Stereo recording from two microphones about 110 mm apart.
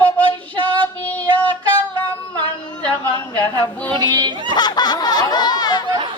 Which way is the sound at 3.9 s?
40° right (ahead or behind).